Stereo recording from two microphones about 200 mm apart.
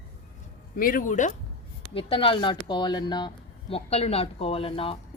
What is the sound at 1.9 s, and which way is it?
Speech, 25° left (ahead or behind).